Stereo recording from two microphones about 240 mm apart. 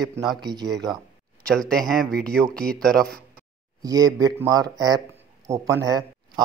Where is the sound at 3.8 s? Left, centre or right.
Centre.